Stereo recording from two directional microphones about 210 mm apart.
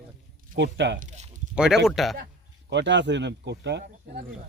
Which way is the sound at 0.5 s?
55° right (ahead or behind).